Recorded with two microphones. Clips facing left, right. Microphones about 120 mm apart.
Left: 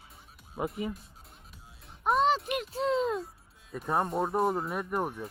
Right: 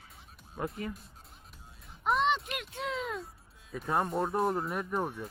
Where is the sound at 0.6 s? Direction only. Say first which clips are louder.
Left 3 dB; 10° left (ahead or behind).